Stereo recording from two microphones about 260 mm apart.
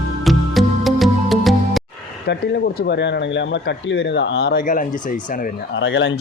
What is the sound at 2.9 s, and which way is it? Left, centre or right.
Speech, left.